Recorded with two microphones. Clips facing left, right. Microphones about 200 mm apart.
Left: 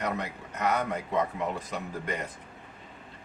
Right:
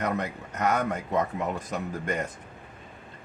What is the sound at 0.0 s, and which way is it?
A man's voice, 45° right (ahead or behind).